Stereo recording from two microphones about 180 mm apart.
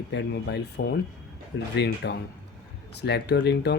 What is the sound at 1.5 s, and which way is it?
Speech, 90° left.